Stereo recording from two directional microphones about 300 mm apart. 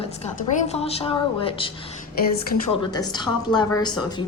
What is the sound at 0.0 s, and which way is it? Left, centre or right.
A woman's voice, left.